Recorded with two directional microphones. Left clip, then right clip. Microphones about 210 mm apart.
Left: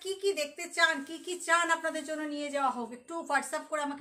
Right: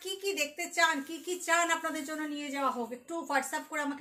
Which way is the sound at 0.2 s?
15° left (ahead or behind).